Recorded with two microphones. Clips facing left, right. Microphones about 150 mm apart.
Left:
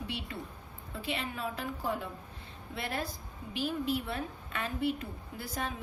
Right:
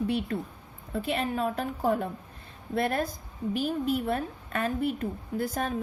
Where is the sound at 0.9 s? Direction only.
50° right (ahead or behind).